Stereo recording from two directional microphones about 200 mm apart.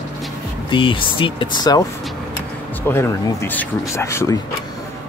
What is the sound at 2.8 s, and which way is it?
Speech, 10° left (ahead or behind).